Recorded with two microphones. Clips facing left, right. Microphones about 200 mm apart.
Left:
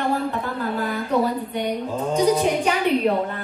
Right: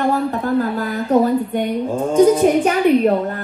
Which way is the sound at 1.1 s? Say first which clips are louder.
Right 8 dB; 45° right (ahead or behind).